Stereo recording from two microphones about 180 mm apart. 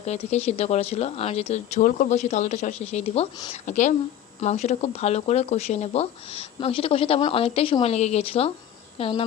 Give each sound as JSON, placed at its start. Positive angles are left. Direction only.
{"t": 0.0, "sound": "a woman's voice", "side_deg": 40}
{"t": 3.7, "sound": "a woman's voice", "side_deg": 40}